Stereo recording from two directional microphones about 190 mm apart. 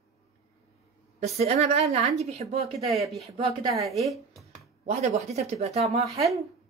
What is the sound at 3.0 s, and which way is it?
A woman's voice, centre (ahead or behind).